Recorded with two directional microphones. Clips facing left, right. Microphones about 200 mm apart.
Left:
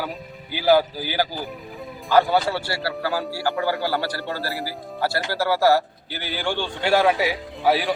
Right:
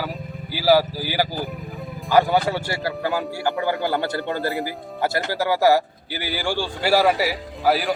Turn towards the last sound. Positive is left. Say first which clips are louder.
# even
turn(degrees=0)  # may be behind; listen again after turning